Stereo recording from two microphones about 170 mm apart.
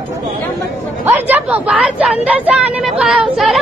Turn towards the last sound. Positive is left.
turn(degrees=-5)  # may be behind; listen again after turning